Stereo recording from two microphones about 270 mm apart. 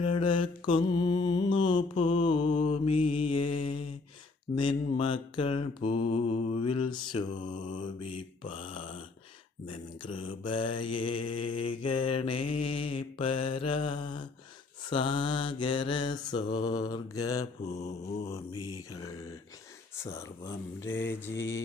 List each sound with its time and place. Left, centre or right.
0.0 s mantra: centre
7.3 s mantra: left
17.7 s mantra: left
18.7 s mantra: centre